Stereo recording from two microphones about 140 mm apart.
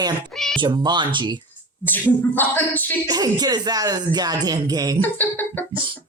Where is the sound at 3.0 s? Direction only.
30° right (ahead or behind).